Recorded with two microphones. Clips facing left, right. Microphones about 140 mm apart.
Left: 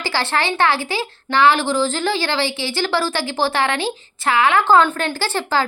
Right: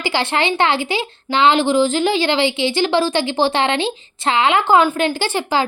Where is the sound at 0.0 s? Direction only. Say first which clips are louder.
Right 2 dB; 15° right (ahead or behind).